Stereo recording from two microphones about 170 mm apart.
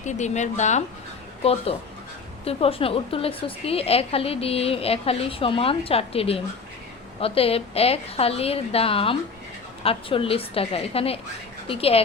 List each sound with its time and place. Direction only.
0.0 s a woman's voice: 45° left (ahead or behind)
2.4 s a woman's voice: 35° left (ahead or behind)